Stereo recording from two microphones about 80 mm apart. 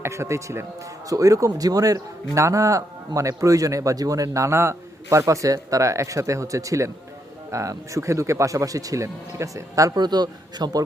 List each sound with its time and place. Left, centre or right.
0.0 s a man's voice: right
9.9 s a man's voice: right